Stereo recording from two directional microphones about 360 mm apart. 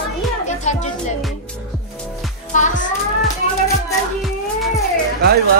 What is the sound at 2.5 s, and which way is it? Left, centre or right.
Music, left.